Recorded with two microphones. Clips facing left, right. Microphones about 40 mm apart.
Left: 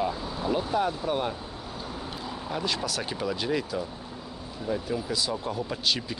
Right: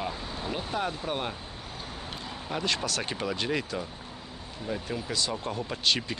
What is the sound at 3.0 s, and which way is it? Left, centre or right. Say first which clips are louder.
Speech: left 1 dB; centre.